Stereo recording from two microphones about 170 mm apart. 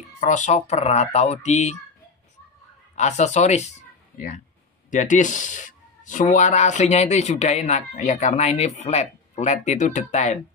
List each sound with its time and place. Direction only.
0.2 s speech: 45° left (ahead or behind)
3.0 s speech: 45° left (ahead or behind)
4.9 s speech: 50° left (ahead or behind)